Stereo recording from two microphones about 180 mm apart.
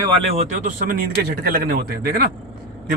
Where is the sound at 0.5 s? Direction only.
45° right (ahead or behind).